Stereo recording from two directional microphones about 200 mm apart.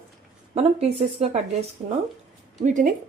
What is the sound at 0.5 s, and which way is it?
A woman's voice, 30° right (ahead or behind).